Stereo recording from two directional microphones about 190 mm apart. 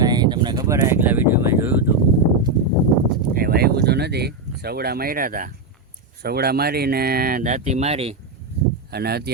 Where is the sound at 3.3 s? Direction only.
50° right (ahead or behind).